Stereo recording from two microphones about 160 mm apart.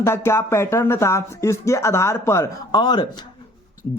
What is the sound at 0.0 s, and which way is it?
Speech, 15° left (ahead or behind).